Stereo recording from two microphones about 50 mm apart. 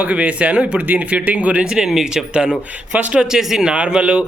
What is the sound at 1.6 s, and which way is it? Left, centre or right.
A man's voice, centre.